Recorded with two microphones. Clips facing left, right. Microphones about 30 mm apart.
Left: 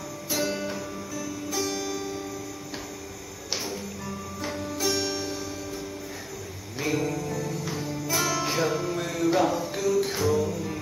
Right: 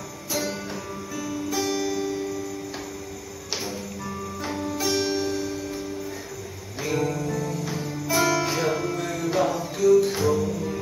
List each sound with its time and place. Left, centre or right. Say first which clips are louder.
0.3 s music: left 1 dB; centre
1.1 s music: right 4 dB; centre
4.4 s music: right 2 dB; centre
4.9 s music: right 4 dB; centre
6.8 s music: right 1 dB; centre
7.1 s music: right 2 dB; centre